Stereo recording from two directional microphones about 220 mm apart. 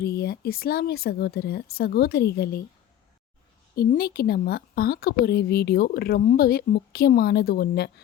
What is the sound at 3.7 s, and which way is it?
A woman's voice, 45° left (ahead or behind).